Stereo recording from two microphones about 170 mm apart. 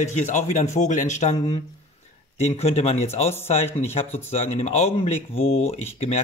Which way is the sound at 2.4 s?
40° left (ahead or behind).